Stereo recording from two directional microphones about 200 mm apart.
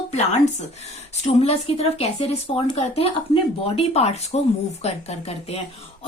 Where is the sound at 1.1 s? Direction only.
30° left (ahead or behind).